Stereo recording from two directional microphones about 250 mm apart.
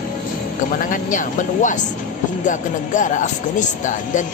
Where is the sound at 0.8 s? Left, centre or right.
Left.